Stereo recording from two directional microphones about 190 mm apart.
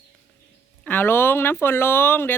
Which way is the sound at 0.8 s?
10° left (ahead or behind).